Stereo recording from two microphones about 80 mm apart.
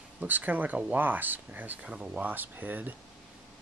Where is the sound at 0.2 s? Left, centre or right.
Centre.